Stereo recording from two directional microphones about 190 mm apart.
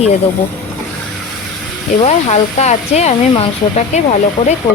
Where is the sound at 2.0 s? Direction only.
35° left (ahead or behind).